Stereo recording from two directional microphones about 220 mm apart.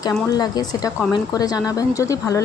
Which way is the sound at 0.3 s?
20° left (ahead or behind).